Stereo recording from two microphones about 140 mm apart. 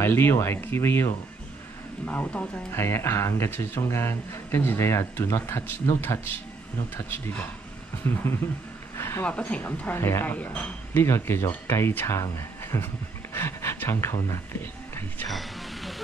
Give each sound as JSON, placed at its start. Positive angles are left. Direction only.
{"t": 0.0, "sound": "speech", "side_deg": 15}
{"t": 8.1, "sound": "speech", "side_deg": 15}
{"t": 15.2, "sound": "a sound", "side_deg": 0}